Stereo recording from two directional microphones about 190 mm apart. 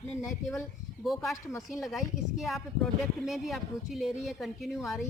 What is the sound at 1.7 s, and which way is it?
A woman's voice, centre (ahead or behind).